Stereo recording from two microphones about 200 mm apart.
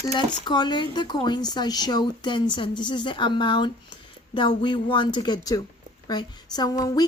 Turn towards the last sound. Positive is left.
turn(degrees=20)  # may be behind; listen again after turning